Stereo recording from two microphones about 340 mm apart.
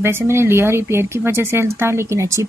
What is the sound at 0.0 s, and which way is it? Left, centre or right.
Speech, centre.